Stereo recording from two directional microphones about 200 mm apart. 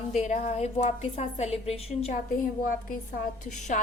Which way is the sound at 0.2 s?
35° left (ahead or behind).